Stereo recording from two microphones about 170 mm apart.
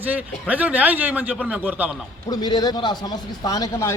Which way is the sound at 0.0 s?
10° right (ahead or behind).